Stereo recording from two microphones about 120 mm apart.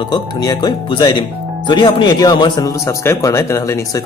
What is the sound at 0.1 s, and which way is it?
A man's voice, 35° left (ahead or behind).